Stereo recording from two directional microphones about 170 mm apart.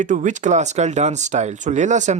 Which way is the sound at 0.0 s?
50° right (ahead or behind).